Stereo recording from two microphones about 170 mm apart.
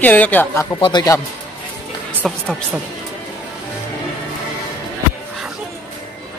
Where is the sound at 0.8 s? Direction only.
25° left (ahead or behind).